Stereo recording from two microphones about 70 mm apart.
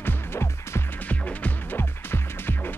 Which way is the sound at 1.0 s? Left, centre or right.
Left.